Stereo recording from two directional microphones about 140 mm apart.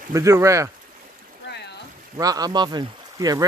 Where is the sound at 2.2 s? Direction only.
25° right (ahead or behind).